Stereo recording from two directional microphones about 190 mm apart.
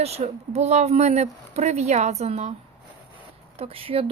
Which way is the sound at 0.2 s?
35° right (ahead or behind).